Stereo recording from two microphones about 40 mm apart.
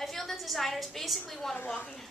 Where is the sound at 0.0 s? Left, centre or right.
Centre.